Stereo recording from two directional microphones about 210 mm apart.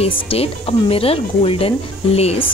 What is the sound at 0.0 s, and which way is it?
Speech, 30° left (ahead or behind).